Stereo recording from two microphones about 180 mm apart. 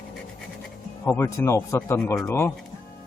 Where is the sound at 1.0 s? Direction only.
15° left (ahead or behind).